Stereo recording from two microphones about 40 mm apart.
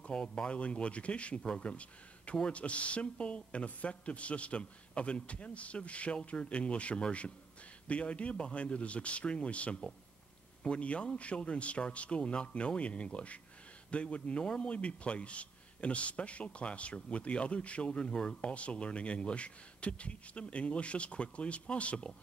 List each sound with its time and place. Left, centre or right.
0.0 s a man's voice: left